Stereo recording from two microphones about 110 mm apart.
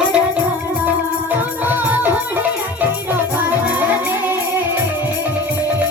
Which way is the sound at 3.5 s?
15° right (ahead or behind).